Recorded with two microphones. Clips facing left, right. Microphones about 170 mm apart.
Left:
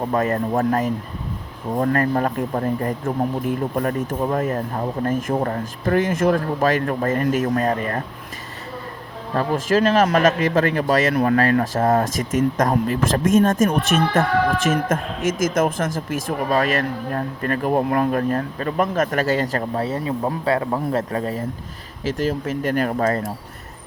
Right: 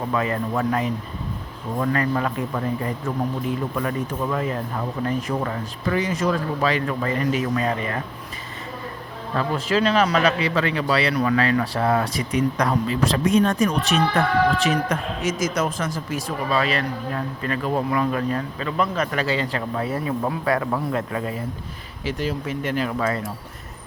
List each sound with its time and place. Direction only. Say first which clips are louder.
0.1 s speech: left 3 dB; 45° left (ahead or behind)
9.3 s speech: left 3 dB; 40° left (ahead or behind)
19.9 s a man's voice: left 1 dB; 25° left (ahead or behind); by 23.2 s 45° left (ahead or behind)